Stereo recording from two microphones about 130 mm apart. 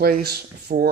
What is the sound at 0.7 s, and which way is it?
Speech, 90° right.